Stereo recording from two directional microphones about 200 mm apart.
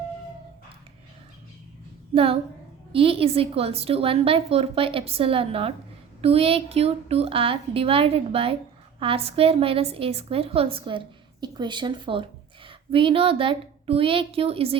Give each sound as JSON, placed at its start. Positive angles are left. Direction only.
{"t": 2.1, "sound": "a woman's voice", "side_deg": -30}